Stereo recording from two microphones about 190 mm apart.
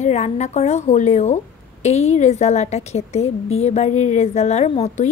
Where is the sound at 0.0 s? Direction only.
35° left (ahead or behind).